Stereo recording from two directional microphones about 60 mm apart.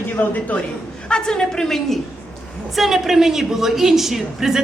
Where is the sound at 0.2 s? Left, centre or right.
Left.